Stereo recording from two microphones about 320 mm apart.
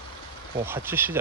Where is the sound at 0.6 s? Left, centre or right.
Centre.